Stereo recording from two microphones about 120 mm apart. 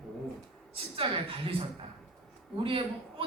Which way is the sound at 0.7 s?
50° right (ahead or behind).